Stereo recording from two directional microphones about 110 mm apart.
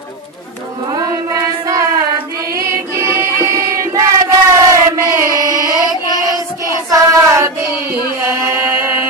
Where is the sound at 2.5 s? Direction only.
25° right (ahead or behind).